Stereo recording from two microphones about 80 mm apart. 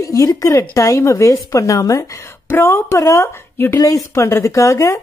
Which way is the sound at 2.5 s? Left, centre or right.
Left.